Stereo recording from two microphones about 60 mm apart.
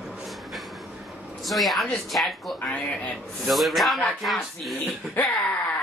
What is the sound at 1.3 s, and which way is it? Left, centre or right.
A woman's voice, centre.